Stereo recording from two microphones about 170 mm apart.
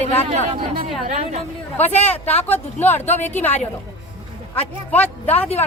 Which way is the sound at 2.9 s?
40° left (ahead or behind).